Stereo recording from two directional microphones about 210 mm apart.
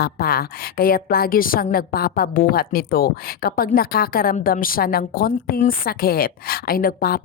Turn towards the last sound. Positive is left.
turn(degrees=45)  # may be behind; listen again after turning